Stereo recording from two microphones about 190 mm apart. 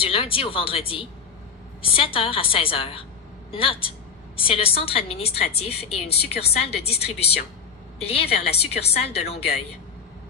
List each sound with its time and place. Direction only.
0.0 s a woman's voice: 30° left (ahead or behind)